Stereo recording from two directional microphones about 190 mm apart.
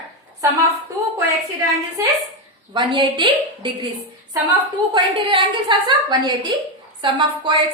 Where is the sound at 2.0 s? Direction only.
15° right (ahead or behind).